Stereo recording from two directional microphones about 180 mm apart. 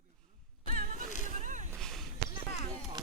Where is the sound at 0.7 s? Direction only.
55° right (ahead or behind).